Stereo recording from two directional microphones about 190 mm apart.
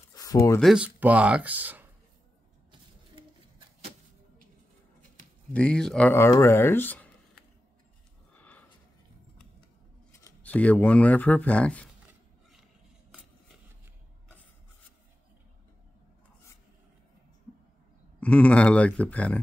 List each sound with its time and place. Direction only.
0.1 s a sound: 20° left (ahead or behind)
0.6 s speech: 5° right (ahead or behind)
3.2 s a sound: 30° right (ahead or behind)
5.5 s speech: 5° left (ahead or behind)
8.4 s sniff: 5° left (ahead or behind)
10.2 s speech: 10° left (ahead or behind)
18.2 s speech: 5° left (ahead or behind)